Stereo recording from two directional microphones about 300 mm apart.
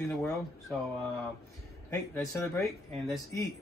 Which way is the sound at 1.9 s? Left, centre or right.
Centre.